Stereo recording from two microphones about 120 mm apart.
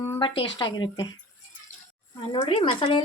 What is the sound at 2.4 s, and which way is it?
Speech, 40° left (ahead or behind).